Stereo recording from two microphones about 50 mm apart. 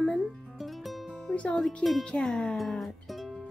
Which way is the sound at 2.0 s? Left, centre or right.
Centre.